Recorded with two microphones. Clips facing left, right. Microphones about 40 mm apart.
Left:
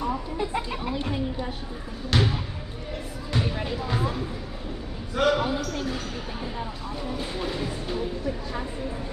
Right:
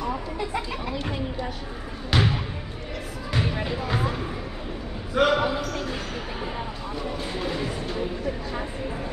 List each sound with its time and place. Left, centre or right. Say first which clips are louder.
2.1 s basketball bounce: right 1 dB; centre
3.3 s music: right 1 dB; right
5.1 s basketball bounce: right 2 dB; right